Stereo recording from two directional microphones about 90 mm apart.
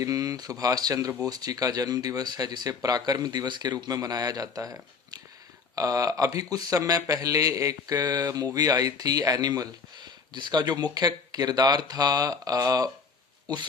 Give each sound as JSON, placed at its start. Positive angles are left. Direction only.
{"t": 0.0, "sound": "a man's voice", "side_deg": -40}